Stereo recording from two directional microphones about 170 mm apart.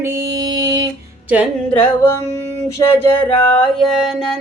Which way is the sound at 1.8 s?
15° left (ahead or behind).